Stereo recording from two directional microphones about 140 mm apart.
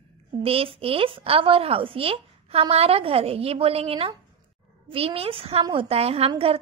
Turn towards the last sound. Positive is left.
turn(degrees=-45)  # may be behind; listen again after turning